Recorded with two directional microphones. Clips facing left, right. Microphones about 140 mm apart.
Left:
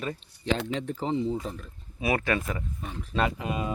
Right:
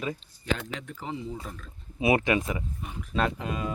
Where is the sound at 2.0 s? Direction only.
20° right (ahead or behind).